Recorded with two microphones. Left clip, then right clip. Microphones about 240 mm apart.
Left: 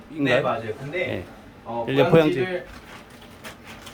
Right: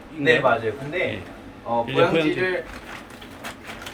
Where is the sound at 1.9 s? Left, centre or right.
Centre.